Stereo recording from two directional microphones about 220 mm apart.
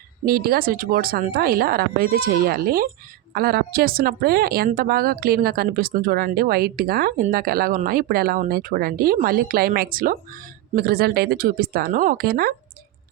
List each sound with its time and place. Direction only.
0.3 s a woman's voice: 45° right (ahead or behind)